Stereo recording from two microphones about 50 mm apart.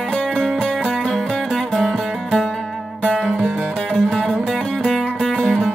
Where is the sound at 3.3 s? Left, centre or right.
Right.